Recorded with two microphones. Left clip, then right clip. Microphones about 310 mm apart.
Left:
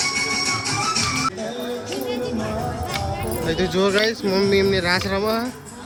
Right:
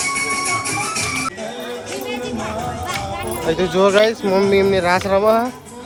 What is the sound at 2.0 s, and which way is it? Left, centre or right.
Music, right.